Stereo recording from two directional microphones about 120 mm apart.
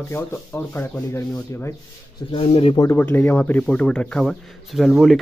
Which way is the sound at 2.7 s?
25° left (ahead or behind).